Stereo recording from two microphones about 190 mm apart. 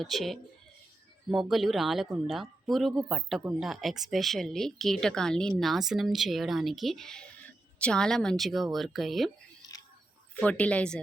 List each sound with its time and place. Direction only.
0.0 s speech: centre (ahead or behind)
9.7 s a sound: 20° left (ahead or behind)
10.4 s speech: 5° left (ahead or behind)